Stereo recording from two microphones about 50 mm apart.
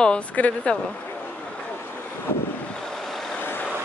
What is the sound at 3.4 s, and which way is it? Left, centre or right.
Vehicle, left.